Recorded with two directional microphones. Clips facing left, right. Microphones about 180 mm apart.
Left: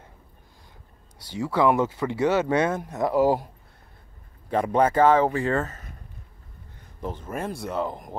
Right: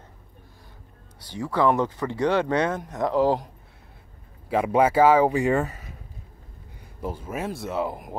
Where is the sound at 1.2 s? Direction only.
10° left (ahead or behind).